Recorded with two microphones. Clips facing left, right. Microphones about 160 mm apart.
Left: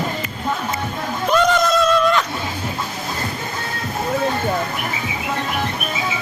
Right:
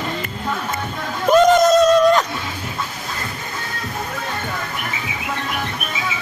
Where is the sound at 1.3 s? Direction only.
45° right (ahead or behind).